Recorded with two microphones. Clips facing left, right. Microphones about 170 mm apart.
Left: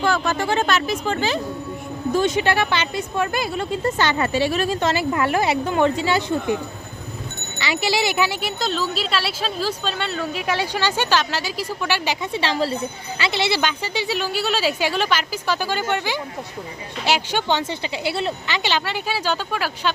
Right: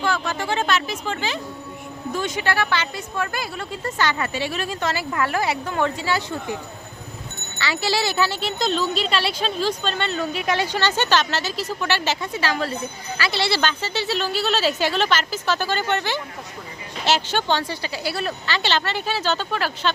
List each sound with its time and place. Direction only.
0.0 s speech: 45° left (ahead or behind)
2.1 s a woman's voice: 25° left (ahead or behind)
4.8 s a woman's voice: 20° left (ahead or behind)
7.6 s a woman's voice: 15° left (ahead or behind)
12.3 s a woman's voice: 30° left (ahead or behind); by 19.9 s 10° left (ahead or behind)